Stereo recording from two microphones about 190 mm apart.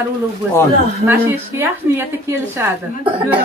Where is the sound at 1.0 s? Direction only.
10° right (ahead or behind).